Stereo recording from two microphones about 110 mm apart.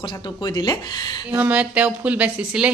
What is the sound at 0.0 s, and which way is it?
Speech, 40° left (ahead or behind).